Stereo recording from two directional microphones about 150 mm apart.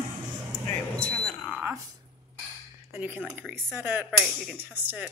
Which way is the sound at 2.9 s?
15° right (ahead or behind).